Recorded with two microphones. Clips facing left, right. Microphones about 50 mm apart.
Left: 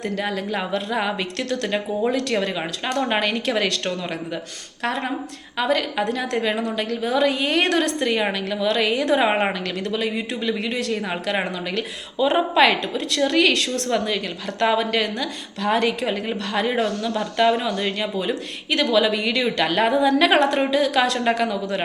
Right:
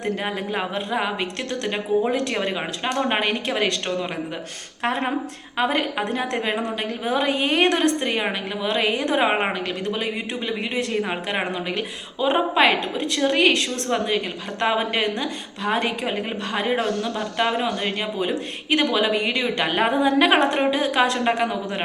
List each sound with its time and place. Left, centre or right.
0.0 s speech: right
0.9 s speech: centre
4.8 s speech: right